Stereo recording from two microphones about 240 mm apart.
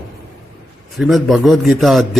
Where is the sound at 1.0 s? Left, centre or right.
Centre.